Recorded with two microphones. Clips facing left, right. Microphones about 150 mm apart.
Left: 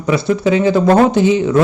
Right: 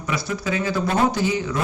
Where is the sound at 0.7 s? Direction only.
65° left (ahead or behind).